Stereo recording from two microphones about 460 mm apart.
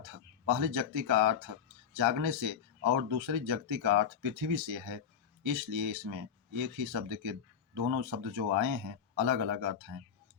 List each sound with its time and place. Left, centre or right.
0.0 s speech: right